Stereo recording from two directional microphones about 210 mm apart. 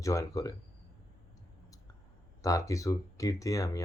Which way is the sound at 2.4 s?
15° left (ahead or behind).